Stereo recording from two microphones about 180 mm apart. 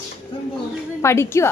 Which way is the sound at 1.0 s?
15° left (ahead or behind).